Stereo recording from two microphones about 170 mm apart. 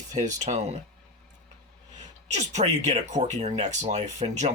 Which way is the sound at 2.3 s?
45° right (ahead or behind).